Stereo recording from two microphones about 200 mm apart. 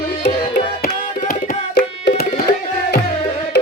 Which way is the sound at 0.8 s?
45° left (ahead or behind).